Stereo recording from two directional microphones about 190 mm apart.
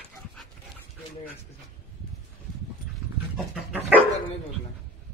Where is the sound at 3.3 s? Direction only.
5° right (ahead or behind).